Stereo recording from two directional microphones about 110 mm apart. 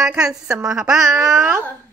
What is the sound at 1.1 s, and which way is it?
Speech, 30° right (ahead or behind).